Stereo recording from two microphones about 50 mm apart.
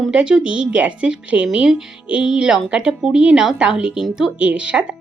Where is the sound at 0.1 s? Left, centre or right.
Centre.